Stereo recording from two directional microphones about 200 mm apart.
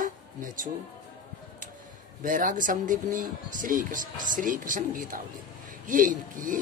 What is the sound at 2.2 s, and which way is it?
Speech, 40° right (ahead or behind).